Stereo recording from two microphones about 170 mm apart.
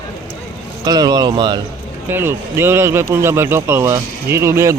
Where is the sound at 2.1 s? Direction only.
15° right (ahead or behind).